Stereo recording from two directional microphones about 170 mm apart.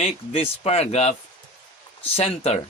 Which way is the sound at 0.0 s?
40° left (ahead or behind).